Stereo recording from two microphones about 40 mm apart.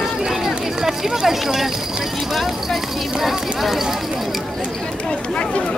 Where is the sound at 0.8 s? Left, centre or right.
Centre.